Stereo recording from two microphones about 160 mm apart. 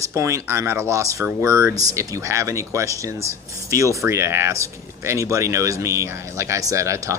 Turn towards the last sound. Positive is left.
turn(degrees=-20)  # may be behind; listen again after turning